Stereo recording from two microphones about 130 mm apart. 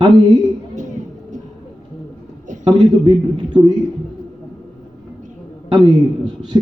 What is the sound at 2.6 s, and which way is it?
A man's voice, 35° right (ahead or behind).